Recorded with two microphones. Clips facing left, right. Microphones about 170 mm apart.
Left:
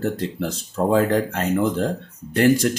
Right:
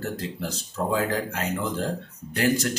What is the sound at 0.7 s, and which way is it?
Speech, 55° left (ahead or behind).